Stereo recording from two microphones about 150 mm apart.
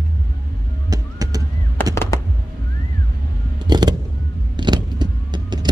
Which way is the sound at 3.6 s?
25° right (ahead or behind).